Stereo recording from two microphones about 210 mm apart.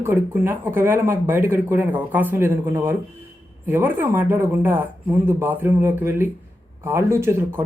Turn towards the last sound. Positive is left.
turn(degrees=-10)  # may be behind; listen again after turning